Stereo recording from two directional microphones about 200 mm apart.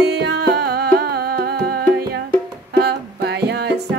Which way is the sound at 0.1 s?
55° right (ahead or behind).